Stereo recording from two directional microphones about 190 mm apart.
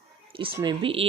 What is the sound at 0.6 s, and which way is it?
Speech, 25° right (ahead or behind).